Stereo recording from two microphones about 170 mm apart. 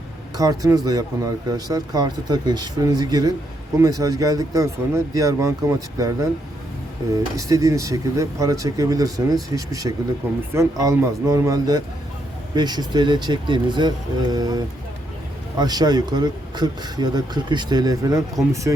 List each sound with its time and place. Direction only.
0.3 s speech: 20° right (ahead or behind)
7.3 s speech: 20° right (ahead or behind)